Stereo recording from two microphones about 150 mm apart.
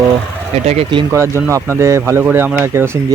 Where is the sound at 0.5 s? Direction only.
45° right (ahead or behind).